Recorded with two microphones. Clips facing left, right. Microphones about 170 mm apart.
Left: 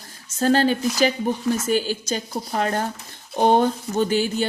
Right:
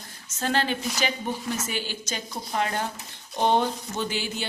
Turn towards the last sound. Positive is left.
turn(degrees=45)  # may be behind; listen again after turning